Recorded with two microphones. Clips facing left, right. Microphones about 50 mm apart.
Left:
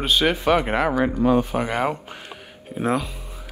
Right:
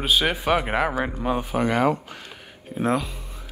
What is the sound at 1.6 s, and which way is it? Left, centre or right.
Mantra, centre.